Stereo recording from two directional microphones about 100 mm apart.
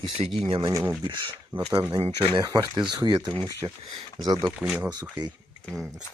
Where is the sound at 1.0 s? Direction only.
45° right (ahead or behind).